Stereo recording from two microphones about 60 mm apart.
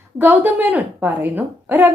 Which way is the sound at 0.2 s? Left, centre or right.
Right.